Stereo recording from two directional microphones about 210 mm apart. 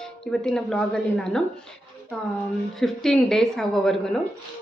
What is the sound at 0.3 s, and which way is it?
Speech, 5° left (ahead or behind).